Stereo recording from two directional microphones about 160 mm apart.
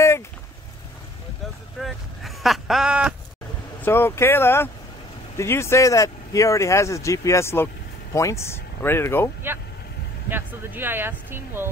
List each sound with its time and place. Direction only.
1.8 s a sound: centre (ahead or behind)
3.8 s speech: 15° left (ahead or behind)
10.3 s speech: 15° right (ahead or behind)